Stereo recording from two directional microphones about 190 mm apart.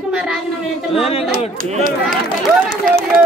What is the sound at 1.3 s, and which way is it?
Speech, 50° right (ahead or behind).